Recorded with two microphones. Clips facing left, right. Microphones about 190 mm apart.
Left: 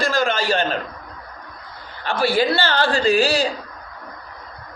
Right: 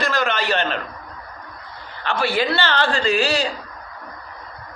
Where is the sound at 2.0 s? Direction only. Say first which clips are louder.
Left 2 dB; 35° left (ahead or behind).